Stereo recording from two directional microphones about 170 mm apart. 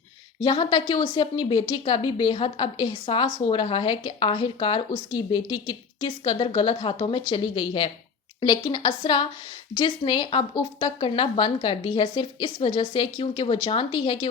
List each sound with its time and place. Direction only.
0.4 s speech: 30° left (ahead or behind)